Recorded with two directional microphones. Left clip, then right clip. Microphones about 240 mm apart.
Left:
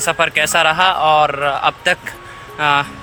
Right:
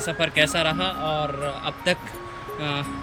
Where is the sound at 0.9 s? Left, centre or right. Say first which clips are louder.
Left 13 dB; left.